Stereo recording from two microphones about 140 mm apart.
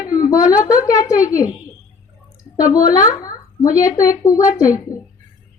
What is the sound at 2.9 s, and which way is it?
A woman's voice, 25° left (ahead or behind).